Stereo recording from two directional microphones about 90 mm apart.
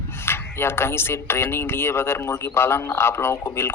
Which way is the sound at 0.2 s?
25° left (ahead or behind).